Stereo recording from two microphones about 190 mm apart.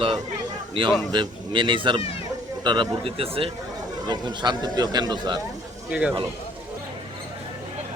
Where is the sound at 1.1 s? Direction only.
25° right (ahead or behind).